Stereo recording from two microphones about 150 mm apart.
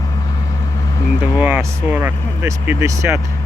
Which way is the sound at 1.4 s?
10° right (ahead or behind).